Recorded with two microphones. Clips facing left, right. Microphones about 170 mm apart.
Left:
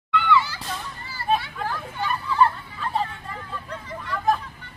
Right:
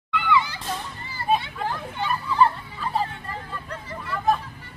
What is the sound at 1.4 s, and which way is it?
Hubbub, 20° right (ahead or behind).